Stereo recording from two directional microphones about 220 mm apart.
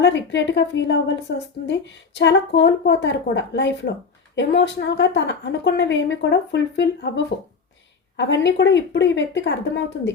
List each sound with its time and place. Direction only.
0.0 s a woman's voice: 55° left (ahead or behind)
8.1 s a woman's voice: 50° left (ahead or behind)